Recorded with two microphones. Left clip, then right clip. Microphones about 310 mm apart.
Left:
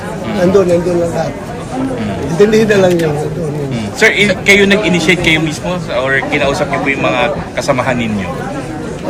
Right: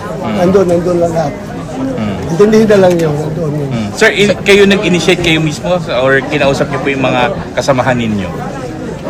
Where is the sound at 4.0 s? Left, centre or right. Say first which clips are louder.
Right 1 dB; right.